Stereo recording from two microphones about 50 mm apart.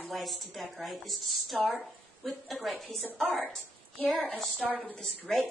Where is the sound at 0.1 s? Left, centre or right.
Centre.